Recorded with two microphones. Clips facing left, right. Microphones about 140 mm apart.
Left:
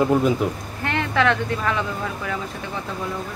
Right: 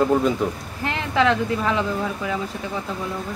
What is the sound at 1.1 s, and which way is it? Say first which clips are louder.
Speech: right 2 dB; 25° right (ahead or behind).